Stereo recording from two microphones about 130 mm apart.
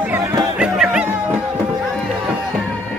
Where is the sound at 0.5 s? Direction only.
5° right (ahead or behind).